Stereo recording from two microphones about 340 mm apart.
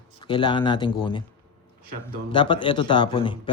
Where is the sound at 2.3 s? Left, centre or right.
Centre.